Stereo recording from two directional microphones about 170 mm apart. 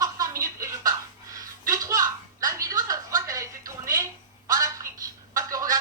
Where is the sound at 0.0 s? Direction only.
20° right (ahead or behind).